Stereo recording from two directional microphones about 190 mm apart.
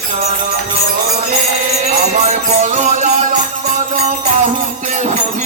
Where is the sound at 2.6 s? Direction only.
35° right (ahead or behind).